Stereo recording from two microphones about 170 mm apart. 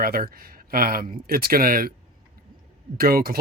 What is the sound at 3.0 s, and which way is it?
Speech, 60° right (ahead or behind).